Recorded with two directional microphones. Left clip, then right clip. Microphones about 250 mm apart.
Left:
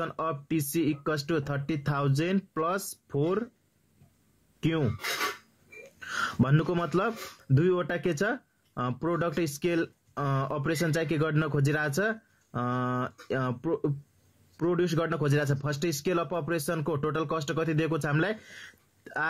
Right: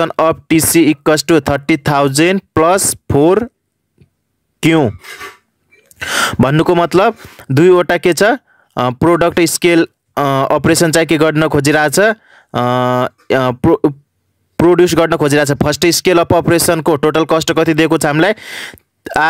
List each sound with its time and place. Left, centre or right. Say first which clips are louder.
0.0 s speech: right 19 dB; right
4.6 s speech: right 18 dB; right
5.9 s speech: right 17 dB; right